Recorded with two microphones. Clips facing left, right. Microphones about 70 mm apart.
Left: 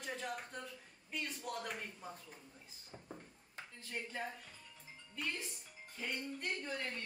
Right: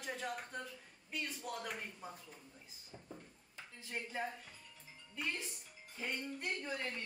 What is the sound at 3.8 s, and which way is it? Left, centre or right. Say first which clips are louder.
Speech: right 2 dB; centre.